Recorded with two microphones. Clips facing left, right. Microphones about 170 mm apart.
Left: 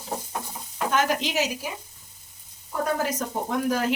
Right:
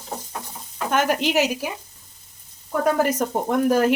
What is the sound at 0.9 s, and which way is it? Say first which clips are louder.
Speech: right 5 dB; 60° right (ahead or behind).